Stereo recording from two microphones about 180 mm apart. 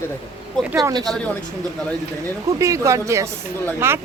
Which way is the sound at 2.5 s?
15° right (ahead or behind).